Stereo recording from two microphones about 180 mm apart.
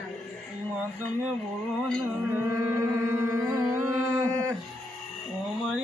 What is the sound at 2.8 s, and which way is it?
Music, 15° right (ahead or behind).